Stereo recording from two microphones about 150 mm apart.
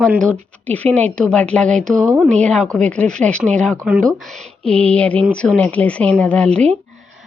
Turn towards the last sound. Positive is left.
turn(degrees=10)  # may be behind; listen again after turning